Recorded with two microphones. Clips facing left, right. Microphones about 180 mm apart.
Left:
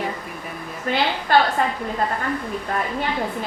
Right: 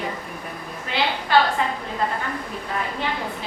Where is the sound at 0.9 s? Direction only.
50° left (ahead or behind).